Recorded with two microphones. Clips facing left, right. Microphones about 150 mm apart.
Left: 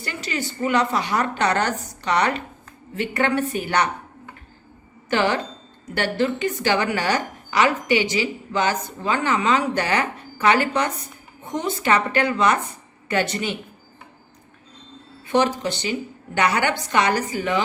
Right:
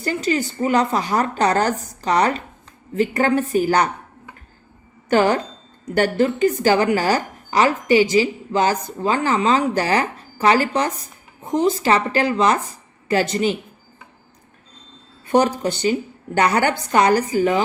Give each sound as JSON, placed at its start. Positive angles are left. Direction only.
{"t": 0.0, "sound": "a woman's voice", "side_deg": -35}
{"t": 5.0, "sound": "a woman's voice", "side_deg": -40}
{"t": 15.3, "sound": "a woman's voice", "side_deg": -40}